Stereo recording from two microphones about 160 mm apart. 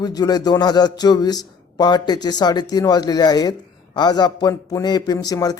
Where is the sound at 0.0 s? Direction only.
25° left (ahead or behind).